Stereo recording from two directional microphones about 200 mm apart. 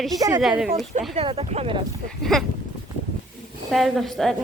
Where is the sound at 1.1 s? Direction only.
30° right (ahead or behind).